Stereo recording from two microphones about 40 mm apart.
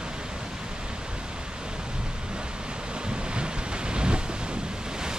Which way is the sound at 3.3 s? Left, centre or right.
Right.